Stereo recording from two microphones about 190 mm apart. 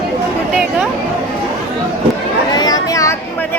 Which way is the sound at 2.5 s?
20° left (ahead or behind).